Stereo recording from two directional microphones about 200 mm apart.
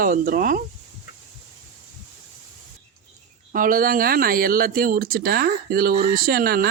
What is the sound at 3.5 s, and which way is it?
Speech, 45° right (ahead or behind).